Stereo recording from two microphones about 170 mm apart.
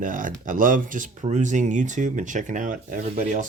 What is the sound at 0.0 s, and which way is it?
Speech, 50° right (ahead or behind).